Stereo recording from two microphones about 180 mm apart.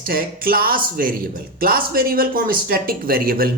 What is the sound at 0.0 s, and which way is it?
A woman's voice, 55° right (ahead or behind).